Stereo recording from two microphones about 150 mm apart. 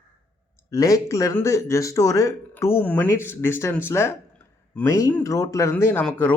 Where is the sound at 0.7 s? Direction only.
20° left (ahead or behind).